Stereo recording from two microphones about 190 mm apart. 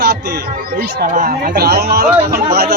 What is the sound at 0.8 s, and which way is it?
A man's voice, 50° right (ahead or behind).